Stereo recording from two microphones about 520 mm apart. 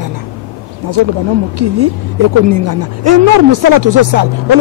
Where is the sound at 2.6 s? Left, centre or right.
Right.